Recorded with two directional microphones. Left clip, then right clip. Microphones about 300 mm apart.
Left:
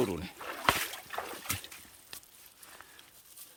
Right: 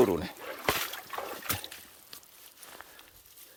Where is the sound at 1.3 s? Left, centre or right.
Centre.